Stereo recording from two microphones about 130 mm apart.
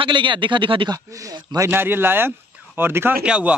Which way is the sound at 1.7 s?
15° right (ahead or behind).